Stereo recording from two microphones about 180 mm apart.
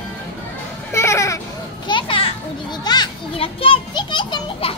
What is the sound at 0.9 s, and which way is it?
Speech, 15° left (ahead or behind).